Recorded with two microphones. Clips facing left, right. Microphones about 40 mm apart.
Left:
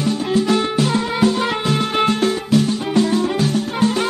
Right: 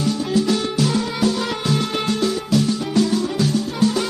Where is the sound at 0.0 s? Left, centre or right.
Left.